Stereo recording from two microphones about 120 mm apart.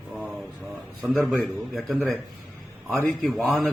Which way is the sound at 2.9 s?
5° left (ahead or behind).